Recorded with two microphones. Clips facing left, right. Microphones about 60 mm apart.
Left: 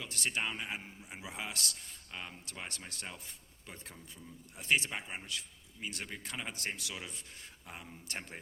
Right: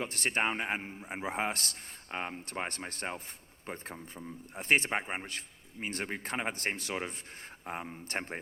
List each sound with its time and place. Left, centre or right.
0.0 s a man's voice: right